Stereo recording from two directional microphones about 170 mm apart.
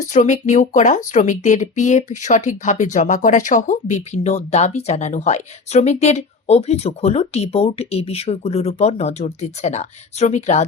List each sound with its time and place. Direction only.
0.0 s speech: 45° left (ahead or behind)